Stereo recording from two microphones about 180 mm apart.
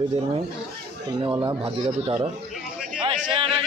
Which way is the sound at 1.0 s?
25° right (ahead or behind).